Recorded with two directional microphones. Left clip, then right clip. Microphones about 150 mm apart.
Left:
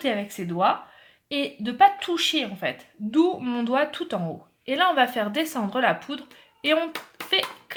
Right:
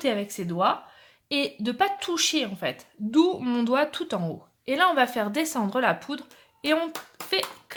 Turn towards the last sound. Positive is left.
turn(degrees=-25)  # may be behind; listen again after turning